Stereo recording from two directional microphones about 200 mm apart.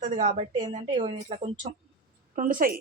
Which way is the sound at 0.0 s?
40° right (ahead or behind).